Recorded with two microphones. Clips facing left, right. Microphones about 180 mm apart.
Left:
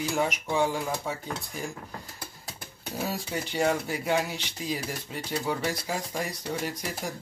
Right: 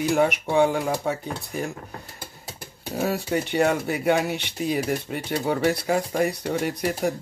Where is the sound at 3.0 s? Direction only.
65° right (ahead or behind).